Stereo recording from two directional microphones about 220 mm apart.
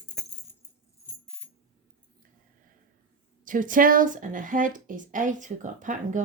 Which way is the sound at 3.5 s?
35° right (ahead or behind).